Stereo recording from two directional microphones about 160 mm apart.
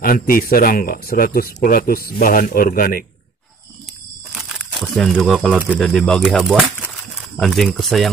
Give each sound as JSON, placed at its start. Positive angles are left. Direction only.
{"t": 0.0, "sound": "speech", "side_deg": 65}
{"t": 4.3, "sound": "speech", "side_deg": 0}